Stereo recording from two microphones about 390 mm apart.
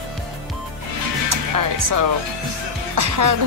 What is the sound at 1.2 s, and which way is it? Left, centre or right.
Music, right.